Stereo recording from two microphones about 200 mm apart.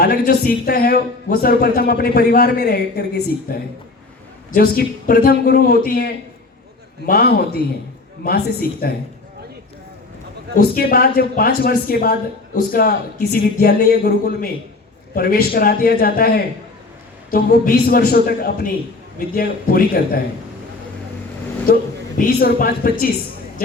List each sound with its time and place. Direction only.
0.0 s speech: 50° left (ahead or behind)
8.8 s speech: 50° left (ahead or behind)
10.6 s speech: 50° left (ahead or behind)
21.7 s speech: 50° left (ahead or behind)